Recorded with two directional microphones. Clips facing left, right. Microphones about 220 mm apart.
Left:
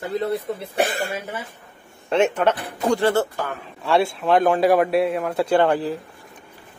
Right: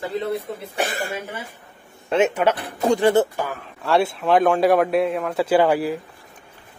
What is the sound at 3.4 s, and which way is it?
Speech, centre (ahead or behind).